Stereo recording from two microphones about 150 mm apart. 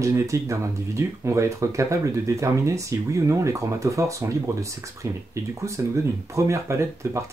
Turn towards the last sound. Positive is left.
turn(degrees=-20)  # may be behind; listen again after turning